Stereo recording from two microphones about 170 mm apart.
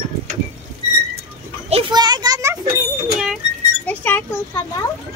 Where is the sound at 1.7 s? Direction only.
30° right (ahead or behind).